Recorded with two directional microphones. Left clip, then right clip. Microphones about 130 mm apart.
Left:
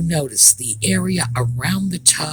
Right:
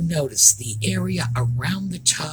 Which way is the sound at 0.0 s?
40° left (ahead or behind).